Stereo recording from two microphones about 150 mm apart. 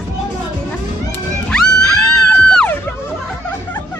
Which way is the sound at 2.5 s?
5° left (ahead or behind).